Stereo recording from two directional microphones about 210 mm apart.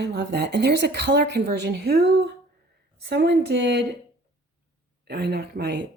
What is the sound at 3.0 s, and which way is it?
Speech, 50° right (ahead or behind).